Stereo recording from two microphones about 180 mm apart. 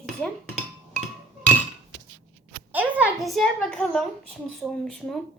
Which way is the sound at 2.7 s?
10° right (ahead or behind).